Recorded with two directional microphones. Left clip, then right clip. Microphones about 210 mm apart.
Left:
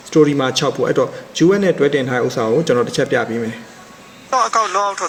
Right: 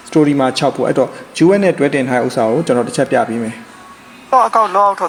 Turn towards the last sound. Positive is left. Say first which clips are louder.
# right 5 dB
turn(degrees=5)  # may be behind; listen again after turning